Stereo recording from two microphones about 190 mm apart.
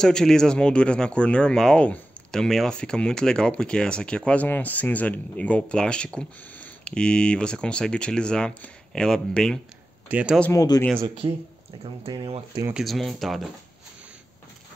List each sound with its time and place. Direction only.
0.0 s speech: 5° left (ahead or behind)
10.4 s speech: 15° left (ahead or behind)
11.0 s speech: 30° right (ahead or behind)
12.7 s speech: centre (ahead or behind)